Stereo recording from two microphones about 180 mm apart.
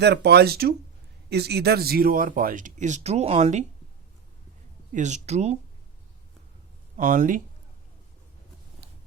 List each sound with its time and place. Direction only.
0.0 s speech: 65° right (ahead or behind); by 3.6 s 35° right (ahead or behind)
4.9 s speech: 40° right (ahead or behind)
6.9 s speech: 50° right (ahead or behind)
8.8 s a sound: 60° right (ahead or behind)